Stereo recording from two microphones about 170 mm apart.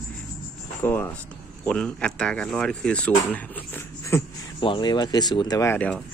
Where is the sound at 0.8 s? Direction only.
10° left (ahead or behind).